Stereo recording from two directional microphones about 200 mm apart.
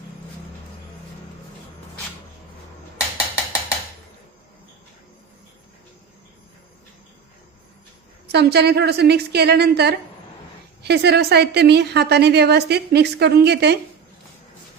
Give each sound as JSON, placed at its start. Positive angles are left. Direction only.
{"t": 8.3, "sound": "a woman's voice", "side_deg": -55}